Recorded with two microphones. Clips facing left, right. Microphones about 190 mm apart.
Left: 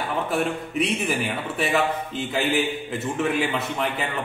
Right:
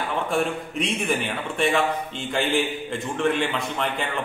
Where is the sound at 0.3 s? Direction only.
Centre (ahead or behind).